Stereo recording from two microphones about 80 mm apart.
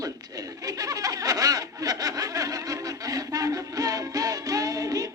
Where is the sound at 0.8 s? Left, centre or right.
Right.